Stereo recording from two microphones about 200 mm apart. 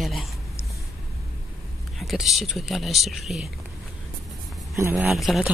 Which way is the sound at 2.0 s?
Centre (ahead or behind).